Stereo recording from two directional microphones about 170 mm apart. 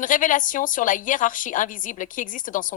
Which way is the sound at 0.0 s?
50° left (ahead or behind).